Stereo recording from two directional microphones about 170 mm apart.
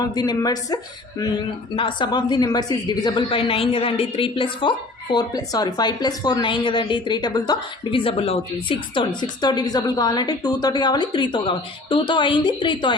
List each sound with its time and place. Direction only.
0.0 s a woman's voice: 25° left (ahead or behind)